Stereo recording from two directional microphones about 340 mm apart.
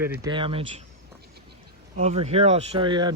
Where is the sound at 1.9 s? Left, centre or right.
Centre.